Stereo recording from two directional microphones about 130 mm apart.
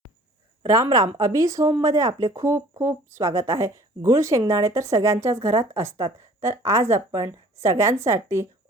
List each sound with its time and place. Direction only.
0.6 s a woman's voice: 25° right (ahead or behind)